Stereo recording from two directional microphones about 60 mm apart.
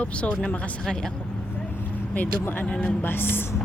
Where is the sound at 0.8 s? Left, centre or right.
Centre.